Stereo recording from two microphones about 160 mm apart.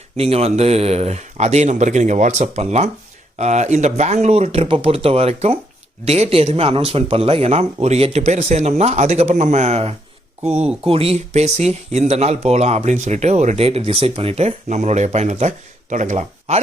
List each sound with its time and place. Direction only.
0.2 s speech: 40° right (ahead or behind)